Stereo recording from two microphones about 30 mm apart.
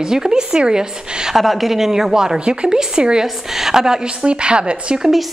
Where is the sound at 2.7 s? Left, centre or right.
Right.